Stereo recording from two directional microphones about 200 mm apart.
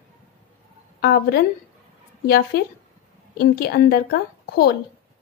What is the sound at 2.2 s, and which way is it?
Speech, 50° left (ahead or behind).